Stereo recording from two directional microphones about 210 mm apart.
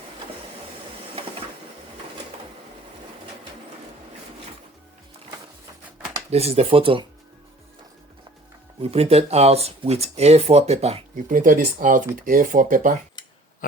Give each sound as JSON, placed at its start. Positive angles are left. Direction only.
{"t": 6.3, "sound": "speech", "side_deg": -30}
{"t": 8.8, "sound": "speech", "side_deg": -30}